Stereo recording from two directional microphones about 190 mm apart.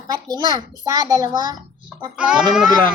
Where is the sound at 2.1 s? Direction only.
5° right (ahead or behind).